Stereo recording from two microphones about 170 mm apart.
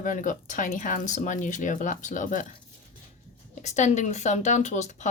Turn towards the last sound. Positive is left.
turn(degrees=45)  # may be behind; listen again after turning